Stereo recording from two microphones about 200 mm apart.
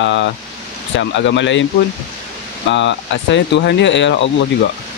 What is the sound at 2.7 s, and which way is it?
Speech, 65° left (ahead or behind).